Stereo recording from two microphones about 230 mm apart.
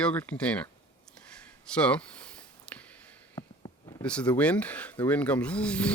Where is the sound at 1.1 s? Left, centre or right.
Centre.